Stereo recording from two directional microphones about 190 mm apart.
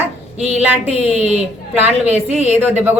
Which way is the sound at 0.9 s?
35° right (ahead or behind).